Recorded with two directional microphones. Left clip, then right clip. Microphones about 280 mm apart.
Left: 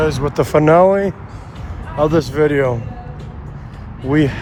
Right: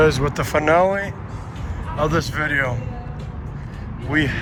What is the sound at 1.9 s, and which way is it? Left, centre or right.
Speech, centre.